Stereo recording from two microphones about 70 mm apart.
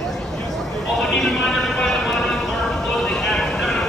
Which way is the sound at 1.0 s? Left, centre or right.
Centre.